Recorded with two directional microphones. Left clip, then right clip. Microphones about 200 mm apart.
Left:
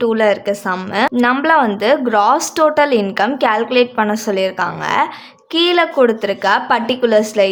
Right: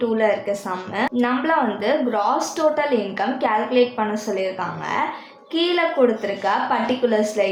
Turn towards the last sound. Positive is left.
turn(degrees=30)  # may be behind; listen again after turning